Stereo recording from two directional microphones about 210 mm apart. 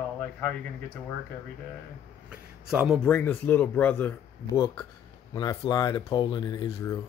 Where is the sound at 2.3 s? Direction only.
5° right (ahead or behind).